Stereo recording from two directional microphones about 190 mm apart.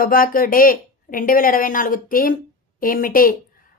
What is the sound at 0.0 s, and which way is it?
Speech, 50° left (ahead or behind).